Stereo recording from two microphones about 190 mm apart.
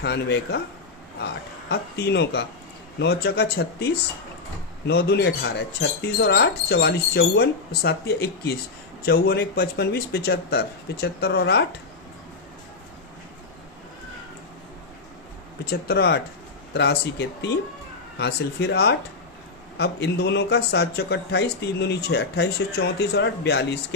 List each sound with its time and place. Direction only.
0.0 s speech: 65° left (ahead or behind)
1.7 s speech: 60° left (ahead or behind)
4.9 s speech: 60° left (ahead or behind)
15.6 s speech: 55° left (ahead or behind)